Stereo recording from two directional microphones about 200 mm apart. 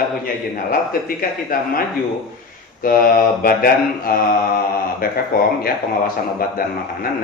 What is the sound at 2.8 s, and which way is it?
A man's voice, 45° left (ahead or behind).